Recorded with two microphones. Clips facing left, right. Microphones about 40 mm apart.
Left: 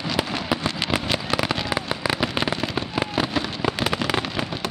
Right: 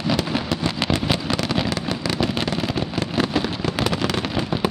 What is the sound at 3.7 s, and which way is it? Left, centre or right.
Fireworks, centre.